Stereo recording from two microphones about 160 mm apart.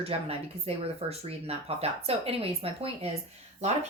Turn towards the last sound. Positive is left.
turn(degrees=-45)  # may be behind; listen again after turning